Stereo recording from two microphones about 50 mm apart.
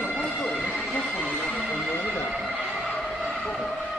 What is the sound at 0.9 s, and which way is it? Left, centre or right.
Train, centre.